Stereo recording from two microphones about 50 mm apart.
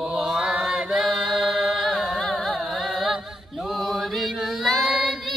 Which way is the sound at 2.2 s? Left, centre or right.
Centre.